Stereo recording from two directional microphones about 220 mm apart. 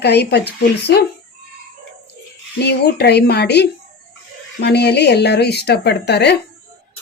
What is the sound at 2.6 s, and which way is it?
Speech, 50° left (ahead or behind).